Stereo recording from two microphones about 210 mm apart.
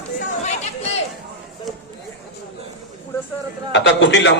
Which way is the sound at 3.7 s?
55° left (ahead or behind).